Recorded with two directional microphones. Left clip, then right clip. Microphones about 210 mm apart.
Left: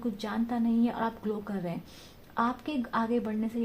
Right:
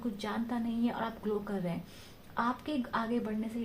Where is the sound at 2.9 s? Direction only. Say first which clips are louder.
Left 5 dB; 45° left (ahead or behind).